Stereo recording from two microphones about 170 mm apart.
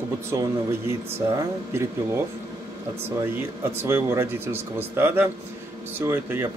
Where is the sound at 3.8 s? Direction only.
15° right (ahead or behind).